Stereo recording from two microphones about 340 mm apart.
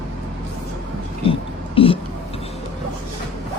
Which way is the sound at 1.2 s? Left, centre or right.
Centre.